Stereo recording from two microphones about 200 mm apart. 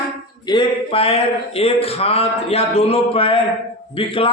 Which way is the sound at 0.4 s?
25° left (ahead or behind).